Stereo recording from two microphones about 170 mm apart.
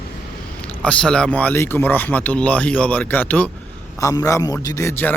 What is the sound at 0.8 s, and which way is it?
A man's voice, 5° left (ahead or behind).